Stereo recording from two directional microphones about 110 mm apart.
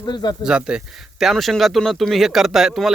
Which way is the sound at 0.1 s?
45° left (ahead or behind).